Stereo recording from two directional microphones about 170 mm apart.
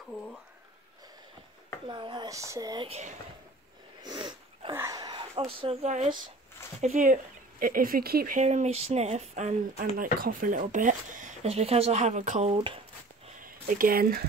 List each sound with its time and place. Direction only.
1.9 s speech: 25° right (ahead or behind)
2.9 s speech: 45° right (ahead or behind)
4.0 s dog: 25° right (ahead or behind)
4.7 s speech: 20° right (ahead or behind); by 8.4 s 60° right (ahead or behind)
8.4 s a sound: 40° right (ahead or behind)
9.8 s speech: 55° right (ahead or behind); by 12.8 s 30° right (ahead or behind)
13.4 s speech: 55° right (ahead or behind)